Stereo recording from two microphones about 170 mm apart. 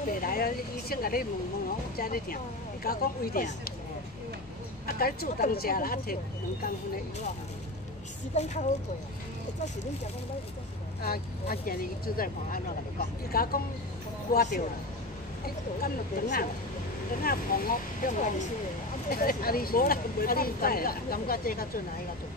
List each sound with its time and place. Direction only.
0.1 s speech: 55° left (ahead or behind)
4.8 s speech: 60° left (ahead or behind)
8.3 s speech: 40° left (ahead or behind)
11.0 s speech: 65° left (ahead or behind)